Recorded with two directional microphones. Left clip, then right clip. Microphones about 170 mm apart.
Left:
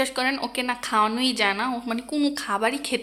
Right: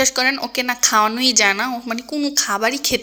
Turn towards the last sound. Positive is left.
turn(degrees=-15)  # may be behind; listen again after turning